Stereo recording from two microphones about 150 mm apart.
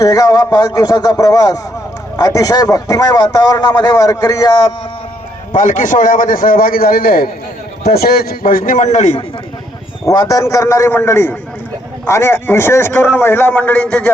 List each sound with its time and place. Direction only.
0.0 s a man's voice: 25° left (ahead or behind)
5.5 s a man's voice: 55° left (ahead or behind)
10.1 s a man's voice: 25° left (ahead or behind)